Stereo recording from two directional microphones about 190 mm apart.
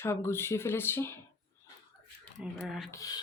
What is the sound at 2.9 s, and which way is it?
Speech, 20° left (ahead or behind).